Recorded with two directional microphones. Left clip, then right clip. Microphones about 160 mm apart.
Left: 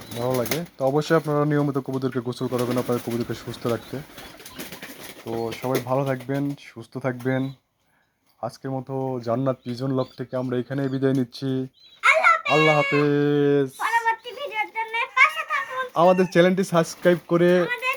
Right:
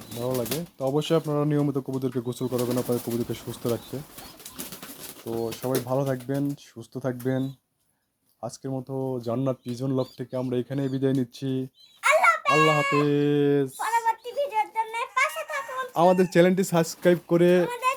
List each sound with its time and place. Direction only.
0.8 s speech: 5° right (ahead or behind)
5.2 s speech: 5° right (ahead or behind)
12.0 s a sound: 65° right (ahead or behind)
12.5 s speech: 5° right (ahead or behind)
13.8 s a sound: 35° right (ahead or behind)
16.0 s speech: 20° right (ahead or behind)